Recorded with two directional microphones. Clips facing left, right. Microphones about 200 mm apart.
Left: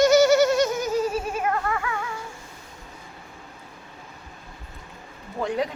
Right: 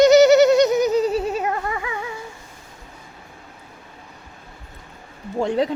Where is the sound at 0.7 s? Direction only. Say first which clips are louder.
Right 6 dB; 20° right (ahead or behind).